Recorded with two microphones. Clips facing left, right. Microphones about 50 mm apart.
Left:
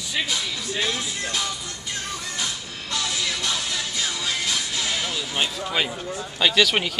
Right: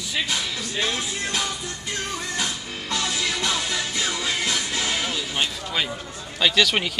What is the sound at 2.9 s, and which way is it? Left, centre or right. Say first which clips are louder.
Music: right 1 dB; right.